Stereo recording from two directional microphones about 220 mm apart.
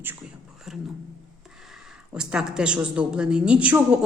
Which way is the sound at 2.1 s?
5° right (ahead or behind).